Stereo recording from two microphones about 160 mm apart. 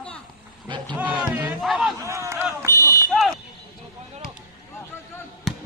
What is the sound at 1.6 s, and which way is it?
Speech, centre (ahead or behind).